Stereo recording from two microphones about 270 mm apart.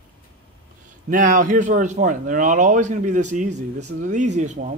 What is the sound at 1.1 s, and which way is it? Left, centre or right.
Speech, right.